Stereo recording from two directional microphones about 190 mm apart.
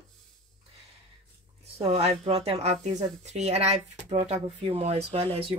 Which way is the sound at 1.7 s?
30° right (ahead or behind).